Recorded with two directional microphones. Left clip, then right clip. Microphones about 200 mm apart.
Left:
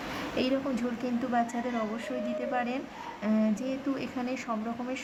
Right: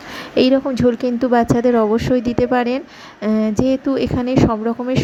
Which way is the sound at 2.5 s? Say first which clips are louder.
Right 13 dB; 40° right (ahead or behind).